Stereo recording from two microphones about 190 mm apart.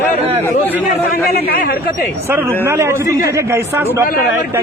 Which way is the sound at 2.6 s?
15° right (ahead or behind).